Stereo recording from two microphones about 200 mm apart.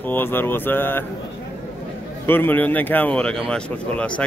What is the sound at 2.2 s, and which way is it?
A man's voice, 10° left (ahead or behind).